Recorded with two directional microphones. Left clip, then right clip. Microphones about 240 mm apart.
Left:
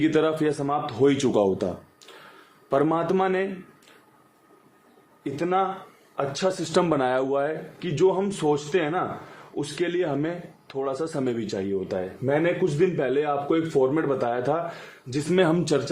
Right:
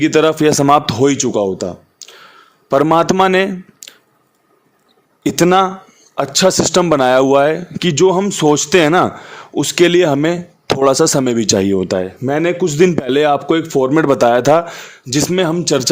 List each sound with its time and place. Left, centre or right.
0.0 s speech: right
1.0 s a man's voice: right
2.0 s a sound: right
2.6 s speech: right
5.2 s speech: right
6.7 s speech: right
15.3 s a man's voice: right